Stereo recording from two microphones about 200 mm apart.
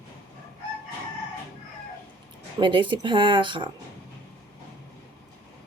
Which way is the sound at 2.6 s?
25° right (ahead or behind).